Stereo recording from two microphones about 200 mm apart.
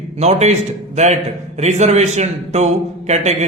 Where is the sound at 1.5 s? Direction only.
35° right (ahead or behind).